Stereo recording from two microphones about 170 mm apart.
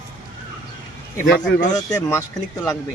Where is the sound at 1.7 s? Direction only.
20° left (ahead or behind).